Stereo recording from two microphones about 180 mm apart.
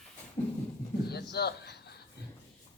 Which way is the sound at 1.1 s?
65° left (ahead or behind).